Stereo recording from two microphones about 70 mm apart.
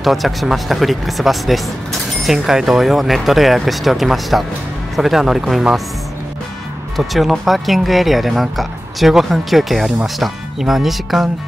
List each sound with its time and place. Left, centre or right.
0.0 s speech: centre
7.0 s speech: centre